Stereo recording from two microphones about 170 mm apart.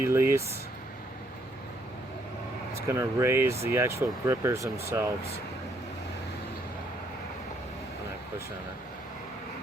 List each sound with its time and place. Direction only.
0.0 s speech: 15° right (ahead or behind)
2.8 s speech: 15° right (ahead or behind)